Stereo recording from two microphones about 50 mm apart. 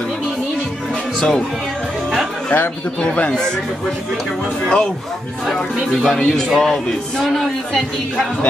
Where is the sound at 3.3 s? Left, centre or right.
Centre.